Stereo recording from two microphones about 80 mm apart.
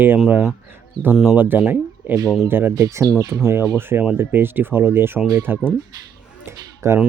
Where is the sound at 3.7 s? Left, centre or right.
Right.